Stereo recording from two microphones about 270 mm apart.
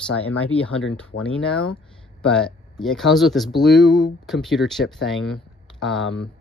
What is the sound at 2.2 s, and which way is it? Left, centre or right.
Speech, centre.